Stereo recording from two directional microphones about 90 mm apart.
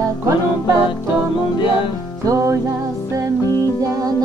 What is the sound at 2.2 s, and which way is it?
Music, 40° right (ahead or behind).